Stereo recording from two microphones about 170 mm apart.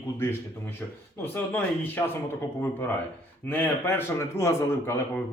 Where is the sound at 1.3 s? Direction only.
10° left (ahead or behind).